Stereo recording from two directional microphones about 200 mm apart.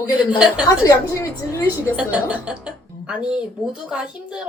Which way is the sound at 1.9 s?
5° right (ahead or behind).